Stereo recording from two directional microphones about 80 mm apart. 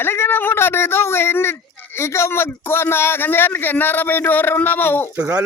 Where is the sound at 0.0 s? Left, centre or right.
Left.